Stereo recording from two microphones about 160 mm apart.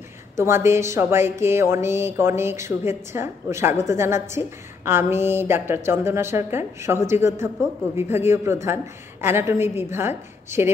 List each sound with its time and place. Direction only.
0.4 s a woman's voice: 15° right (ahead or behind)